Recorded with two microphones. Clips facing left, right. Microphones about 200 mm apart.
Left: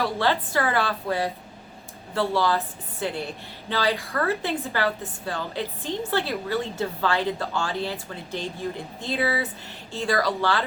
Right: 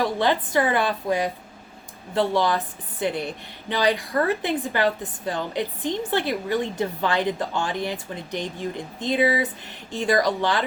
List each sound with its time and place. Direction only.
0.0 s a woman's voice: 15° right (ahead or behind)